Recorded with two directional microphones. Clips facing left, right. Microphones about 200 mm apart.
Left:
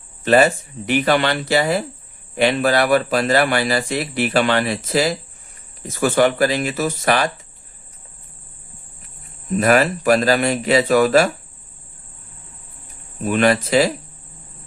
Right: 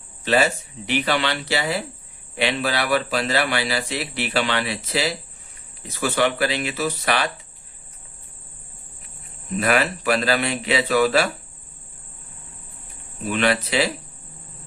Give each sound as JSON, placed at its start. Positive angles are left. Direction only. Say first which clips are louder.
{"t": 0.3, "sound": "a man's voice", "louder": "left 6 dB", "side_deg": 50}
{"t": 9.6, "sound": "a man's voice", "louder": "left 5 dB", "side_deg": 45}
{"t": 13.2, "sound": "a man's voice", "louder": "left 5 dB", "side_deg": 45}